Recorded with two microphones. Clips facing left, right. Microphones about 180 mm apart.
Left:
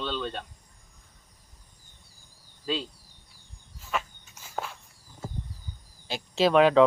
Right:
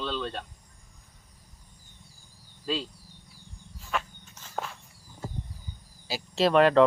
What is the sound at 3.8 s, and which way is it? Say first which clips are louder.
Walk: even; 5° left (ahead or behind).